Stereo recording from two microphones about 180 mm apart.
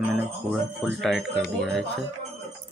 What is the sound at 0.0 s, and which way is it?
Speech, 5° right (ahead or behind).